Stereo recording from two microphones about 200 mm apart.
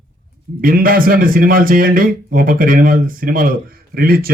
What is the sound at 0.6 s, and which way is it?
Speech, 45° right (ahead or behind).